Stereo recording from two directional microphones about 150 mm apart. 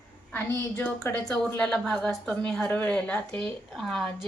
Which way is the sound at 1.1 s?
5° left (ahead or behind).